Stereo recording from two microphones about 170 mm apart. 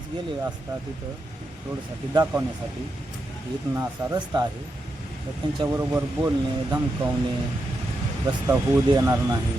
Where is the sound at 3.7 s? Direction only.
20° right (ahead or behind).